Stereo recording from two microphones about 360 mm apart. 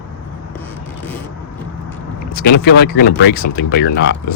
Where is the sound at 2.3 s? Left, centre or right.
Left.